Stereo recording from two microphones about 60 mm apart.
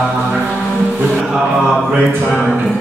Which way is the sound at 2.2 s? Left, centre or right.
Centre.